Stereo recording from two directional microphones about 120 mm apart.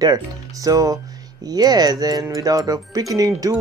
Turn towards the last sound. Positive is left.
turn(degrees=-30)  # may be behind; listen again after turning